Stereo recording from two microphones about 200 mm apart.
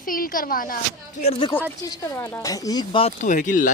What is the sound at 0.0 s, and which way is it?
Speech, 45° left (ahead or behind).